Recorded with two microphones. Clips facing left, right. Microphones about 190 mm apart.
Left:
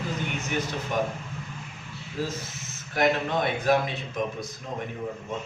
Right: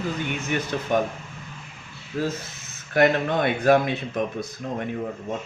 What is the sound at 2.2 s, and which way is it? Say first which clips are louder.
Speech: right 5 dB; 60° right (ahead or behind).